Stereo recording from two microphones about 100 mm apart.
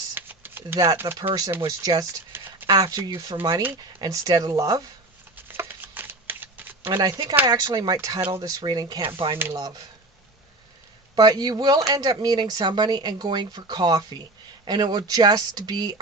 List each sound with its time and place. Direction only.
0.1 s a sound: 20° right (ahead or behind)
0.9 s speech: 20° right (ahead or behind)
1.8 s speech: 40° right (ahead or behind)
2.3 s a sound: 20° right (ahead or behind)
2.6 s speech: 45° right (ahead or behind)
5.5 s shuffling cards: 20° right (ahead or behind)
7.4 s speech: 40° right (ahead or behind)
9.0 s speech: 55° right (ahead or behind)
9.6 s speech: 40° right (ahead or behind)
11.1 s speech: 45° right (ahead or behind)